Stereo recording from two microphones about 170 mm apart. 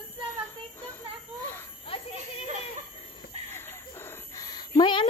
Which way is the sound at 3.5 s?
15° left (ahead or behind).